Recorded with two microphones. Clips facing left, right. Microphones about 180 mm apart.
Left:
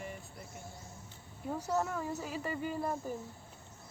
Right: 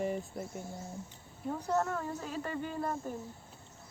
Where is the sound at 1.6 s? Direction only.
5° left (ahead or behind).